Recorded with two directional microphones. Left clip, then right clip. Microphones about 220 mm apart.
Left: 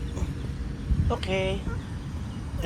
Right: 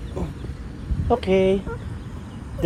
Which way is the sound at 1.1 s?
45° right (ahead or behind).